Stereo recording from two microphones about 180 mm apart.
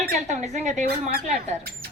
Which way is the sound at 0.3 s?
40° right (ahead or behind).